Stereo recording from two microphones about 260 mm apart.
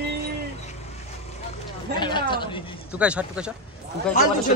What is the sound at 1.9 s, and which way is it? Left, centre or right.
Speech, centre.